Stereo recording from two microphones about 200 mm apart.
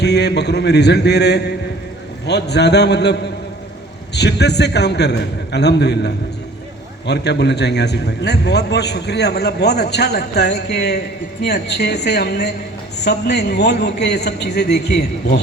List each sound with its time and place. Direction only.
0.0 s a man's voice: 55° left (ahead or behind)